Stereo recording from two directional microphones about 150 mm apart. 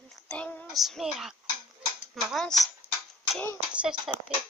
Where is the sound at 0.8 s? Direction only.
Centre (ahead or behind).